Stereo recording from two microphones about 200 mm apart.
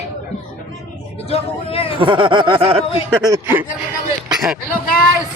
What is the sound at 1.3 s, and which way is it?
Vehicle, 30° left (ahead or behind).